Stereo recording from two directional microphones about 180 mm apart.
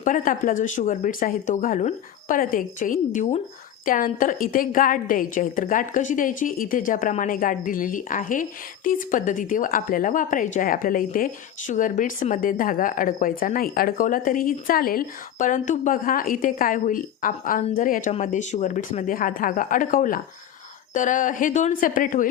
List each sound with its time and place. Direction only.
0.0 s a woman's voice: 50° left (ahead or behind)